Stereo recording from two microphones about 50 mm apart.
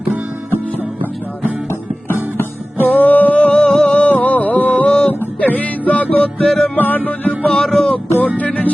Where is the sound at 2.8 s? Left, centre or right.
Left.